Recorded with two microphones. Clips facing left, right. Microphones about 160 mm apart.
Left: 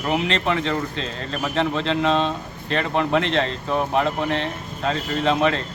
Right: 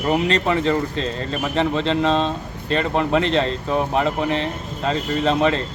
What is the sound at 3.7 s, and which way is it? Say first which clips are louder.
A man's voice: even; centre (ahead or behind).